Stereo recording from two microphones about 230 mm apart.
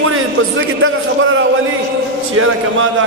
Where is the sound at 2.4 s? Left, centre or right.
Right.